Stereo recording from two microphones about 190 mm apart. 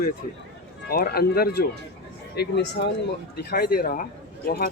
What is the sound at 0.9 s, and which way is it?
Speech, 55° left (ahead or behind).